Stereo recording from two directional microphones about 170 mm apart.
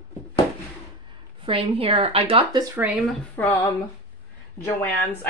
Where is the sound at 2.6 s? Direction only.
10° right (ahead or behind).